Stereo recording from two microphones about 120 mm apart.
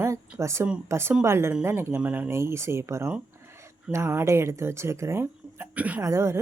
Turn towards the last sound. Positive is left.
turn(degrees=-25)  # may be behind; listen again after turning